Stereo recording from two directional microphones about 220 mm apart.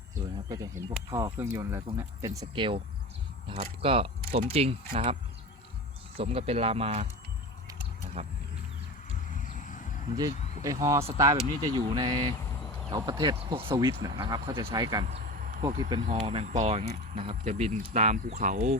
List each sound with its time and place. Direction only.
0.4 s speech: 15° right (ahead or behind)
6.1 s speech: 25° right (ahead or behind)
8.2 s speech: 30° right (ahead or behind)
9.3 s vehicle: 35° left (ahead or behind)
10.2 s speech: 15° right (ahead or behind)
15.0 s a sound: 35° right (ahead or behind)
15.8 s speech: 20° right (ahead or behind); by 18.8 s 35° right (ahead or behind)